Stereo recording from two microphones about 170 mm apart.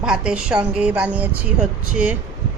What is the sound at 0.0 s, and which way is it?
A woman's voice, 5° right (ahead or behind).